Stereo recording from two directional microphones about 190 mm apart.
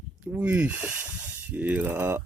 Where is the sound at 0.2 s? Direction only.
5° right (ahead or behind).